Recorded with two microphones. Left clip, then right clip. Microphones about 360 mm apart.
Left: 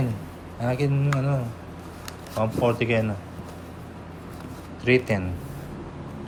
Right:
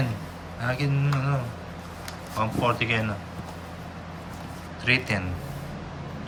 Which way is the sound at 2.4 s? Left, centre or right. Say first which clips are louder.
Left 2 dB; centre.